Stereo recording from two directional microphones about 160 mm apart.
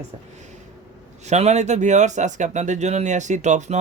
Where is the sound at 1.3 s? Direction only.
45° right (ahead or behind).